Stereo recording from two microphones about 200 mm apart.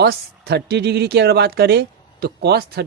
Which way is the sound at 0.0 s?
50° right (ahead or behind).